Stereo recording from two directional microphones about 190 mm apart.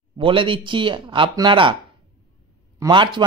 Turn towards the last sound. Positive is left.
turn(degrees=-25)  # may be behind; listen again after turning